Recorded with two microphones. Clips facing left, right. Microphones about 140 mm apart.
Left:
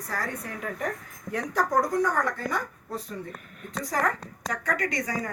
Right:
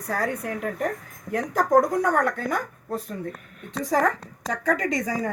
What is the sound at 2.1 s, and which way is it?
Speech, 70° right (ahead or behind).